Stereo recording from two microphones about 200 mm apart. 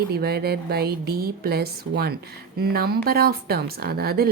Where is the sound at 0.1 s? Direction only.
50° right (ahead or behind).